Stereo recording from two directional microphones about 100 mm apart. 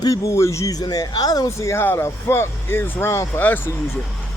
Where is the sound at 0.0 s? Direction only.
35° left (ahead or behind).